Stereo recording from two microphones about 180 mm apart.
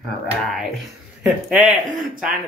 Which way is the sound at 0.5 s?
Centre (ahead or behind).